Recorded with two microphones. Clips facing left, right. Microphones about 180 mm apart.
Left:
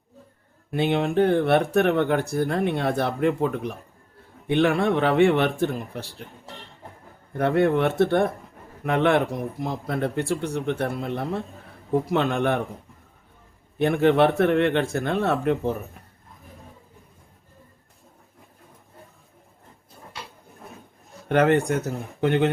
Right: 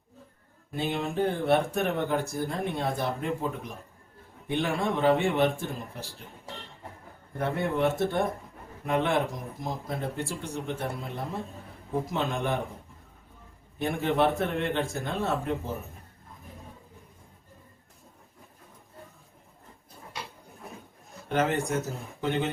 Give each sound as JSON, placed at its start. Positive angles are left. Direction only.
{"t": 0.7, "sound": "speech", "side_deg": 65}
{"t": 7.3, "sound": "speech", "side_deg": 60}
{"t": 13.7, "sound": "speech", "side_deg": 65}
{"t": 21.2, "sound": "speech", "side_deg": 60}